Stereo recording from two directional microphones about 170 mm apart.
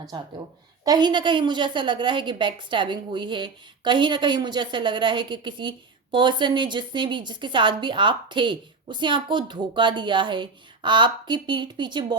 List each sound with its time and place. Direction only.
0.9 s a woman's voice: 25° right (ahead or behind)